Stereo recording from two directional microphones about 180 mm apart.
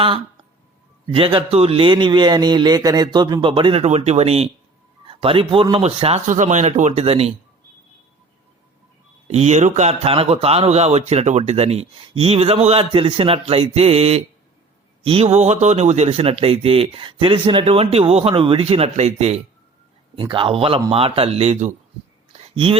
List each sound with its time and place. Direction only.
1.0 s speech: 30° right (ahead or behind)
9.2 s speech: 35° right (ahead or behind)
20.1 s speech: 25° right (ahead or behind)
22.4 s a sound: 30° right (ahead or behind)